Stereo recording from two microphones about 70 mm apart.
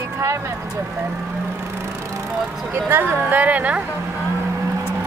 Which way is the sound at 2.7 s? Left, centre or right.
Right.